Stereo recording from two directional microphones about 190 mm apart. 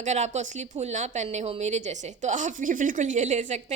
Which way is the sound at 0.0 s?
40° right (ahead or behind).